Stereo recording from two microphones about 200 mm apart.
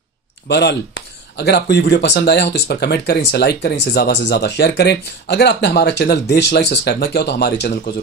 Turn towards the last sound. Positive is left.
turn(degrees=55)  # may be behind; listen again after turning